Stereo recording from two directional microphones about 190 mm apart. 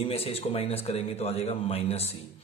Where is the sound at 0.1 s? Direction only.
30° left (ahead or behind).